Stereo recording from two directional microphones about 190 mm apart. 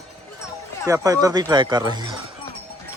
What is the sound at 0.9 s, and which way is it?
Speech, 20° right (ahead or behind).